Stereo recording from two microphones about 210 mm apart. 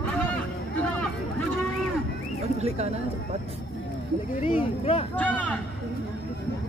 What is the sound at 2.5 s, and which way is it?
Speech, 30° right (ahead or behind).